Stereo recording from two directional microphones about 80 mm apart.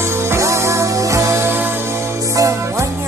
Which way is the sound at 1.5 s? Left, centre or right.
Right.